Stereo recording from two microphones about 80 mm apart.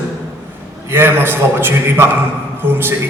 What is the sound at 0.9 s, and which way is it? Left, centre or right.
A man's voice, right.